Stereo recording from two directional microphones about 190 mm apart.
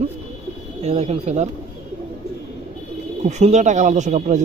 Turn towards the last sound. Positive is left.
turn(degrees=-40)  # may be behind; listen again after turning